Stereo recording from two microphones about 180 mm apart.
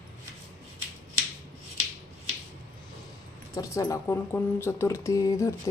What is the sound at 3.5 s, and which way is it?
Speech, 15° left (ahead or behind).